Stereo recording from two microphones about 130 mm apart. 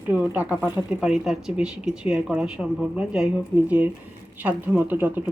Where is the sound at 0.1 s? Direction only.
10° right (ahead or behind).